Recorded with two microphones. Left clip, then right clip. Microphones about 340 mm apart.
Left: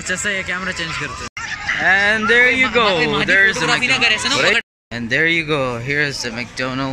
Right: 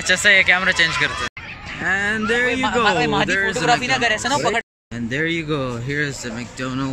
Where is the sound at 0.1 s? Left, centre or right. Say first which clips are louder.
Right 7 dB; centre.